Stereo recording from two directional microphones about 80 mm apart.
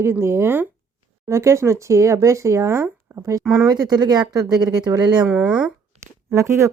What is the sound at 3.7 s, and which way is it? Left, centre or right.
Speech, right.